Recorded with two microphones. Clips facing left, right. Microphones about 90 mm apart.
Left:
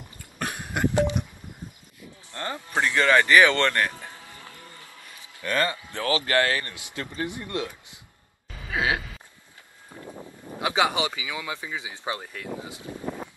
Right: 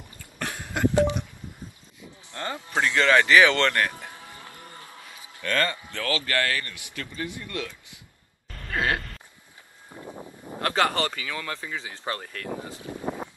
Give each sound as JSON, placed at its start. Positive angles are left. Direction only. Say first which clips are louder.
{"t": 0.4, "sound": "a sound", "louder": "right 1 dB", "side_deg": 20}
{"t": 2.3, "sound": "speech", "louder": "even", "side_deg": 10}
{"t": 3.9, "sound": "music", "louder": "right 1 dB", "side_deg": -20}
{"t": 5.4, "sound": "speech", "louder": "even", "side_deg": 15}
{"t": 8.5, "sound": "groan", "louder": "even", "side_deg": 5}
{"t": 9.9, "sound": "a sound", "louder": "right 1 dB", "side_deg": -10}
{"t": 10.6, "sound": "speech", "louder": "even", "side_deg": 10}
{"t": 12.8, "sound": "wind noise", "louder": "right 2 dB", "side_deg": -20}